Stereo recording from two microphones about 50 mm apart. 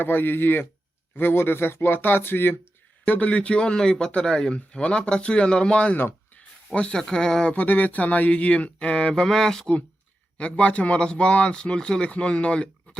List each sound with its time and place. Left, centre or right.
0.0 s speech: left
3.1 s a man's voice: left
7.5 s a man's voice: left; by 9.7 s centre
10.3 s a man's voice: left